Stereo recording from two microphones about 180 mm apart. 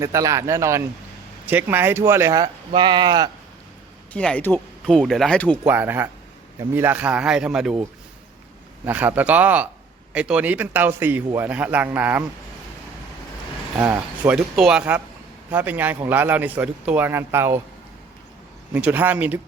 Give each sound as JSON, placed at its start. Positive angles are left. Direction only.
{"t": 0.0, "sound": "speech", "side_deg": -15}
{"t": 4.1, "sound": "speech", "side_deg": 5}
{"t": 5.6, "sound": "speech", "side_deg": -10}
{"t": 13.7, "sound": "speech", "side_deg": -10}
{"t": 18.7, "sound": "speech", "side_deg": -10}